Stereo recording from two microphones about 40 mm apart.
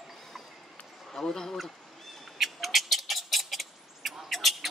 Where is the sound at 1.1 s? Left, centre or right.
Centre.